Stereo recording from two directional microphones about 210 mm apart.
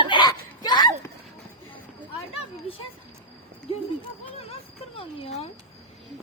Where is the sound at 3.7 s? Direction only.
25° left (ahead or behind).